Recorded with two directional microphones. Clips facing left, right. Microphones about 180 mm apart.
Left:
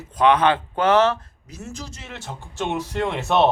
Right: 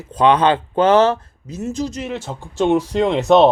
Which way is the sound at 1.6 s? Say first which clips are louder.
Right 13 dB; 20° right (ahead or behind).